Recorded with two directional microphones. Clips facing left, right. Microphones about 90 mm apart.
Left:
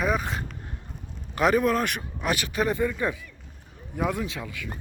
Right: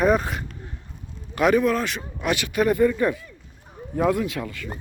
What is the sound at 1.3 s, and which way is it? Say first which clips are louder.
Speech: right 2 dB; 35° left (ahead or behind).